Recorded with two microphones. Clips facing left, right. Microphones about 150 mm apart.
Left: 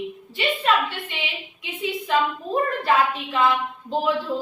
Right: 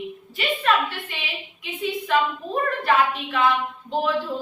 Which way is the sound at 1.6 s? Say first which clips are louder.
Right 1 dB; 20° left (ahead or behind).